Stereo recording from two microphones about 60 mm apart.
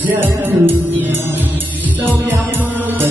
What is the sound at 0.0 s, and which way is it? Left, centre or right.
Music, right.